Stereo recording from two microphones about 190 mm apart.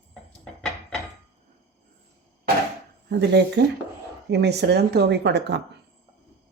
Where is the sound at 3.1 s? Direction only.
60° right (ahead or behind).